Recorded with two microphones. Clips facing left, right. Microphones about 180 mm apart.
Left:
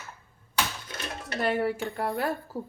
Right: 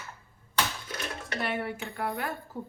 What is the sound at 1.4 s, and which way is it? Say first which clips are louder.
A woman's voice: left 7 dB; 40° left (ahead or behind).